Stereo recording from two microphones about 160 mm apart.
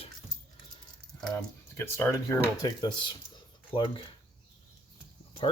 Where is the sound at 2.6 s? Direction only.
25° left (ahead or behind).